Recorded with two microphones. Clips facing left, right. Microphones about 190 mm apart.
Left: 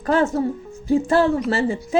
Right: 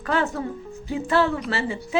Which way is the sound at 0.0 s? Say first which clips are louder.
Left 6 dB; 40° left (ahead or behind).